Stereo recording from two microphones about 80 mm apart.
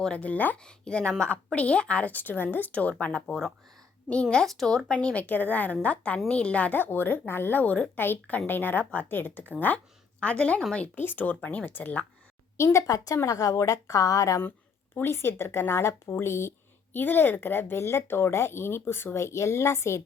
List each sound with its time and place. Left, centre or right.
0.0 s a woman's voice: centre
10.9 s speech: left
12.5 s a woman's voice: left
14.9 s speech: left